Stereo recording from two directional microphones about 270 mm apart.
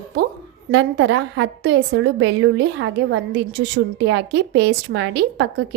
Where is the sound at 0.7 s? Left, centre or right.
Right.